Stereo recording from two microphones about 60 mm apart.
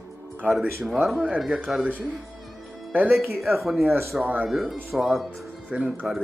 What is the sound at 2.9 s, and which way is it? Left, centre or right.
Speech, right.